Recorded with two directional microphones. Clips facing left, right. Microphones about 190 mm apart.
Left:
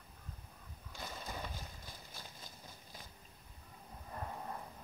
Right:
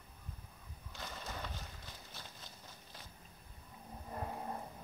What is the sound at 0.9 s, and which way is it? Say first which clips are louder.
Horse: left 1 dB; 10° left (ahead or behind).